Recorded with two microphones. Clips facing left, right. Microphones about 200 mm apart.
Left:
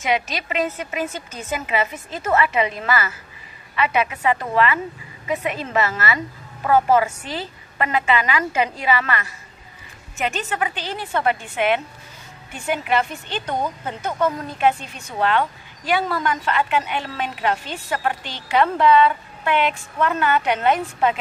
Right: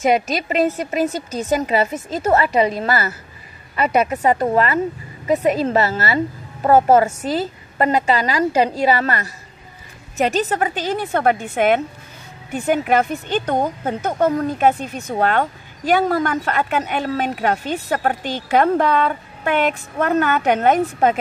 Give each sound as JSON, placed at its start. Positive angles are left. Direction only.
{"t": 0.0, "sound": "a woman's voice", "side_deg": -40}